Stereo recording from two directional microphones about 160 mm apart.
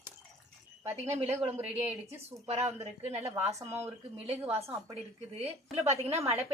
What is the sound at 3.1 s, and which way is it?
Speech, 15° right (ahead or behind).